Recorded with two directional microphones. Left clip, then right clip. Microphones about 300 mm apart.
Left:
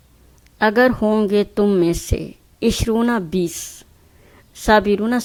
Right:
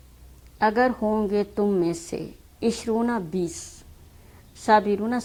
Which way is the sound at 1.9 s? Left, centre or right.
Left.